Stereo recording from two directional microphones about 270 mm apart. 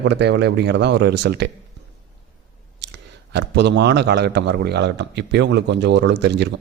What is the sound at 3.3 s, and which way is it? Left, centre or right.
A man's voice, right.